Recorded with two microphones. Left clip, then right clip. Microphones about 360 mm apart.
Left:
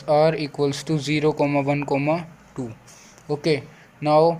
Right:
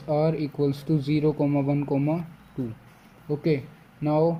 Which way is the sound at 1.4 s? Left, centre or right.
Left.